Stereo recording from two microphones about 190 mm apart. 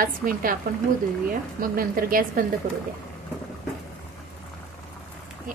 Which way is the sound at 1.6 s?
50° right (ahead or behind).